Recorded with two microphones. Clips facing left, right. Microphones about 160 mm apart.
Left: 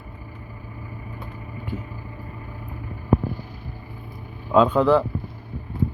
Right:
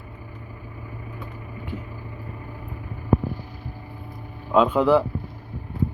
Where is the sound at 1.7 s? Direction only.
45° left (ahead or behind).